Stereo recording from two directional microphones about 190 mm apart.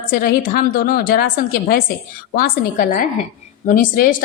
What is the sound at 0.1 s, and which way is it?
A woman's voice, 50° left (ahead or behind).